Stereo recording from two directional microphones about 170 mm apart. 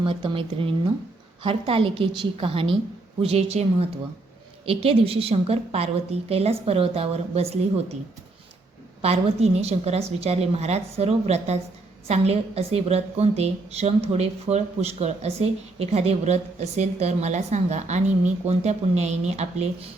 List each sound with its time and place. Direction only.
0.0 s a woman's voice: 30° right (ahead or behind)
9.0 s a woman's voice: 35° right (ahead or behind)